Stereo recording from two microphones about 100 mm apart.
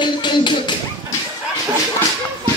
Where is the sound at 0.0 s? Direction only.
50° left (ahead or behind).